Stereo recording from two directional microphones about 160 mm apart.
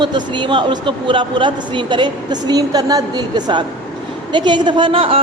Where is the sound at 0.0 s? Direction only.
30° right (ahead or behind).